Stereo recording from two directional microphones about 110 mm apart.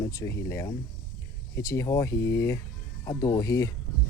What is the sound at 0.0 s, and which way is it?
Speech, 30° left (ahead or behind).